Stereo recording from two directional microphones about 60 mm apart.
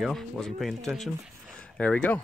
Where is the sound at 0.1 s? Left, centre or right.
Centre.